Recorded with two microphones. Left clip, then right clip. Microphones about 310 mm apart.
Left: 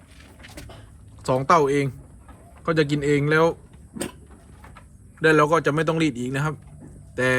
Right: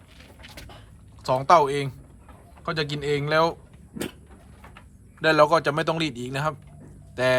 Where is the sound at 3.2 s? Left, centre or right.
Centre.